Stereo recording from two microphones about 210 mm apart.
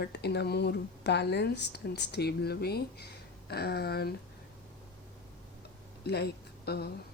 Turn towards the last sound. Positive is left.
turn(degrees=50)  # may be behind; listen again after turning